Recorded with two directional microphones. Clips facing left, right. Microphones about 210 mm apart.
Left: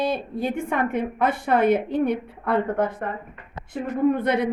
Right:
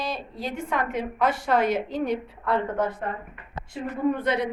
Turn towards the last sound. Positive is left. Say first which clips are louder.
# left 4 dB
turn(degrees=55)  # may be behind; listen again after turning